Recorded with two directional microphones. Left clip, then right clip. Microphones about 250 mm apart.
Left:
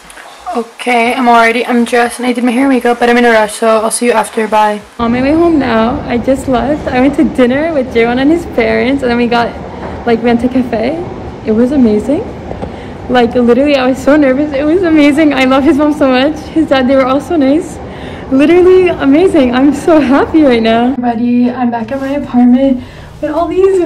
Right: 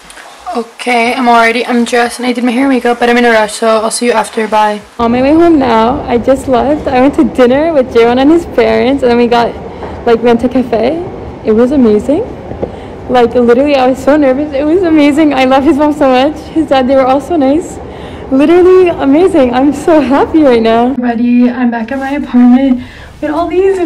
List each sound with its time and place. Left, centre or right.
0.5 s speech: centre
4.9 s a woman's voice: centre
21.0 s speech: centre